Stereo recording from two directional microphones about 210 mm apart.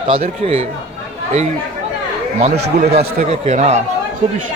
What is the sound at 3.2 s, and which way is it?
Speech, 30° right (ahead or behind).